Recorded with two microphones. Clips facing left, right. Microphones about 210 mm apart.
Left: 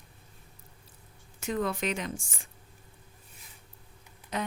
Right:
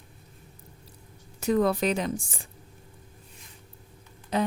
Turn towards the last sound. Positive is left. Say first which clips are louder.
# right 7 dB
turn(degrees=-30)  # may be behind; listen again after turning